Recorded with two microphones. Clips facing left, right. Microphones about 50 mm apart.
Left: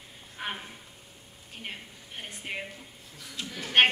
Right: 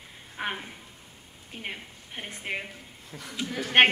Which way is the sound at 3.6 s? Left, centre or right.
Right.